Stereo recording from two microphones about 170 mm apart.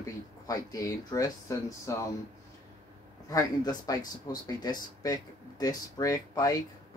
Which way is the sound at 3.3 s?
20° left (ahead or behind).